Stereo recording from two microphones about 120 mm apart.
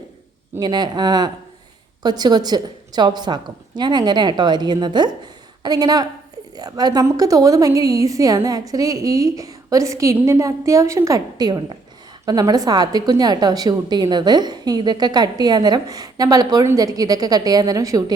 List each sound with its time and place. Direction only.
0.6 s a woman's voice: 35° right (ahead or behind)